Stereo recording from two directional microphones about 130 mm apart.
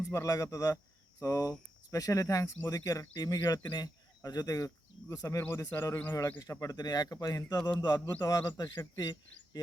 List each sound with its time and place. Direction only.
0.1 s speech: 25° left (ahead or behind)